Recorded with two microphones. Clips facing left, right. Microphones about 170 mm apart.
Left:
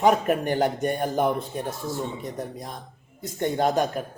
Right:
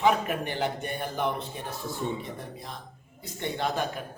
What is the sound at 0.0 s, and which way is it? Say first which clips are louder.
A man's voice: left 5 dB; 45° left (ahead or behind).